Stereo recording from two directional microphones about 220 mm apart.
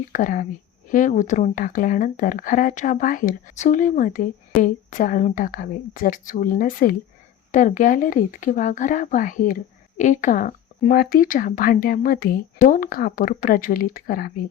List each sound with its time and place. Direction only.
0.1 s speech: 35° left (ahead or behind)